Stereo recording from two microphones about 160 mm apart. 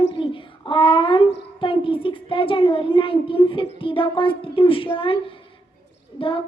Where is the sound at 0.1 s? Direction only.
30° left (ahead or behind).